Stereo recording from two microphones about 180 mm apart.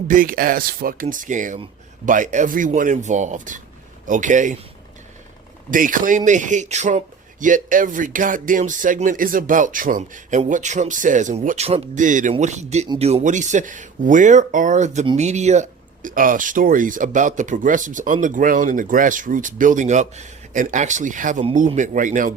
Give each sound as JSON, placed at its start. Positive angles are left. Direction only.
{"t": 0.1, "sound": "speech", "side_deg": -50}
{"t": 5.7, "sound": "speech", "side_deg": -50}